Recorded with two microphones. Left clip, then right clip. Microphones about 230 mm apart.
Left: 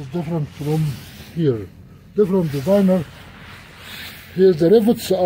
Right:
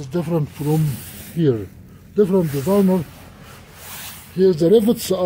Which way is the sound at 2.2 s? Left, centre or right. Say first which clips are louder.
Right 1 dB; centre.